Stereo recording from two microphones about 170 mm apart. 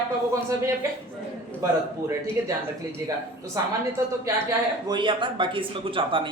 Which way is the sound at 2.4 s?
15° right (ahead or behind).